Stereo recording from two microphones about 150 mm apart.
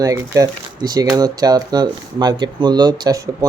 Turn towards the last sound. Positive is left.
turn(degrees=-20)  # may be behind; listen again after turning